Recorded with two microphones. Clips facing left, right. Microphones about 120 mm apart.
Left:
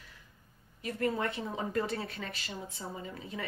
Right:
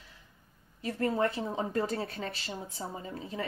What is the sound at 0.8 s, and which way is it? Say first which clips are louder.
Speech: right 3 dB; 30° right (ahead or behind).